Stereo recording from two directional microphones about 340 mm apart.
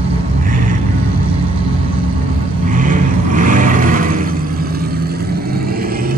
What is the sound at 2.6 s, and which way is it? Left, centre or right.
Vehicle, right.